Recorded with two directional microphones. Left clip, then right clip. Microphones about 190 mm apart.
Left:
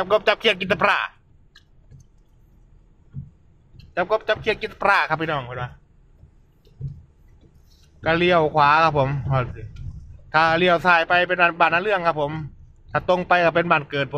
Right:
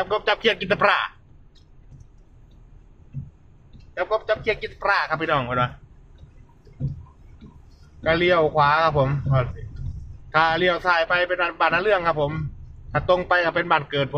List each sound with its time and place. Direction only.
0.0 s speech: 30° left (ahead or behind)
3.9 s a man's voice: 40° left (ahead or behind)
5.4 s speech: 5° left (ahead or behind)
8.0 s a man's voice: 30° left (ahead or behind)